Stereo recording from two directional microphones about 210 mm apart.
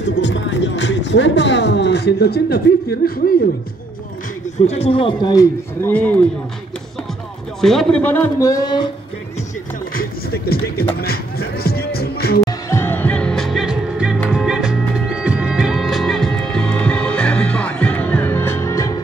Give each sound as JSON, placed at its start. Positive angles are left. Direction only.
{"t": 0.0, "sound": "music", "side_deg": 55}
{"t": 4.6, "sound": "speech", "side_deg": 25}
{"t": 7.6, "sound": "a man's voice", "side_deg": 5}
{"t": 9.9, "sound": "music", "side_deg": 45}
{"t": 12.6, "sound": "music", "side_deg": 10}